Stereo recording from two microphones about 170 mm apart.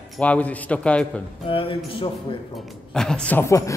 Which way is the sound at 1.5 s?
30° left (ahead or behind).